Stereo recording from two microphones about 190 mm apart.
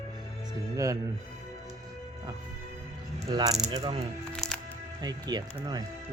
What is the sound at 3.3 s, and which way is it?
Speech, 20° right (ahead or behind).